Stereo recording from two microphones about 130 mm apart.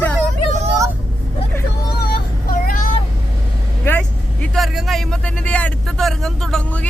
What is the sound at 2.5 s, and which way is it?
Vehicle, 90° left.